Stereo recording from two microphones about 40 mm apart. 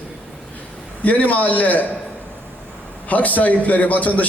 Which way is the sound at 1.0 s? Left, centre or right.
Left.